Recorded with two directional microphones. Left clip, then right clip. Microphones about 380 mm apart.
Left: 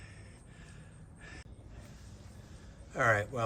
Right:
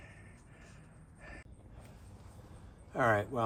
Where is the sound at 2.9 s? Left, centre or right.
Centre.